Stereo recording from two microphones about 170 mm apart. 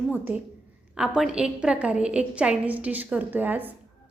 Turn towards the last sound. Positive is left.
turn(degrees=-10)  # may be behind; listen again after turning